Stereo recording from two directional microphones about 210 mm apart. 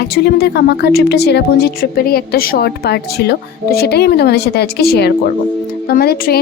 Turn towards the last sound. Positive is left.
turn(degrees=45)  # may be behind; listen again after turning